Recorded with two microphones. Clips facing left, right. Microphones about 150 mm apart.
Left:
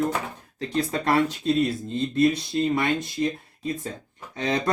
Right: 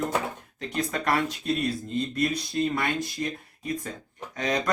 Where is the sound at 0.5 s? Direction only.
30° left (ahead or behind).